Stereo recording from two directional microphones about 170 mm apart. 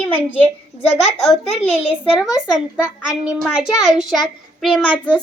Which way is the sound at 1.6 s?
10° left (ahead or behind).